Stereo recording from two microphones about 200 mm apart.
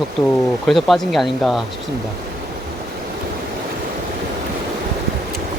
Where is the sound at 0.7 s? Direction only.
Centre (ahead or behind).